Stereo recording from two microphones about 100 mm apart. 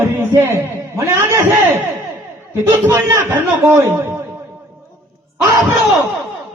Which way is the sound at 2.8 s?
25° right (ahead or behind).